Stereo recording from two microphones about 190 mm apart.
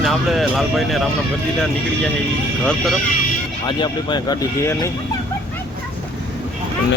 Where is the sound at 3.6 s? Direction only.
25° left (ahead or behind).